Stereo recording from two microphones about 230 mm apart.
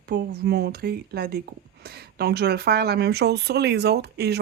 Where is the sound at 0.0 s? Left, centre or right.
Right.